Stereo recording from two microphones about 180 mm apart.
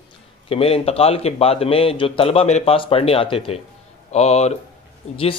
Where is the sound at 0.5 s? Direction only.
35° left (ahead or behind).